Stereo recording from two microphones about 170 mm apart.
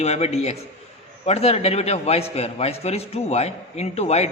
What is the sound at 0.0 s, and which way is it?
A man's voice, 40° left (ahead or behind).